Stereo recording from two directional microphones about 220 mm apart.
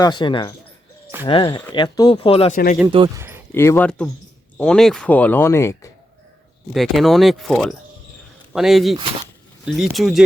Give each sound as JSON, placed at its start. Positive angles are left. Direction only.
{"t": 0.0, "sound": "speech", "side_deg": 20}
{"t": 2.8, "sound": "speech", "side_deg": -20}
{"t": 3.5, "sound": "speech", "side_deg": 10}
{"t": 6.7, "sound": "speech", "side_deg": 0}